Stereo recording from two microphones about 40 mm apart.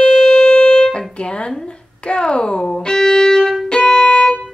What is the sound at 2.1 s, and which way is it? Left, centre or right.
Speech, left.